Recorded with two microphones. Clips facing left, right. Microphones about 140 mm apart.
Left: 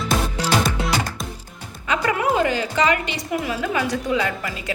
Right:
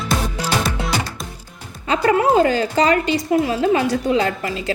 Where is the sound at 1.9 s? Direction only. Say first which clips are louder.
Right 5 dB; 35° right (ahead or behind).